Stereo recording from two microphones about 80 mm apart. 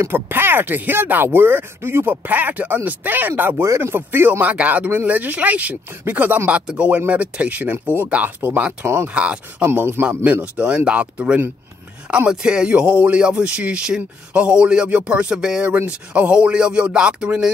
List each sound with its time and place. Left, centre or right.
0.0 s speech: right
3.6 s speech: right
9.1 s speech: centre
9.7 s speech: right
10.0 s speech: centre